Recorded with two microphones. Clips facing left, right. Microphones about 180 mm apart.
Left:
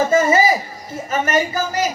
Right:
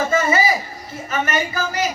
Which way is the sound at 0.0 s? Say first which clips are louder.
Left 4 dB; 40° left (ahead or behind).